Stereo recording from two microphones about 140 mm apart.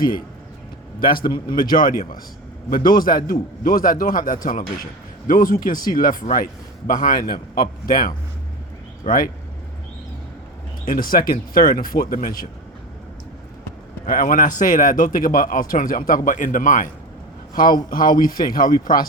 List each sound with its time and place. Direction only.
1.2 s speech: 30° left (ahead or behind)
1.5 s a man's voice: 90° left
6.4 s a man's voice: 70° left (ahead or behind); by 9.3 s 90° left
10.8 s a man's voice: 90° left
14.0 s a man's voice: 85° left
17.5 s a man's voice: 90° left